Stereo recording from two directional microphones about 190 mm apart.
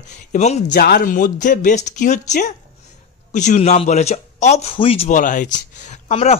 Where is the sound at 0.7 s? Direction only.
55° left (ahead or behind).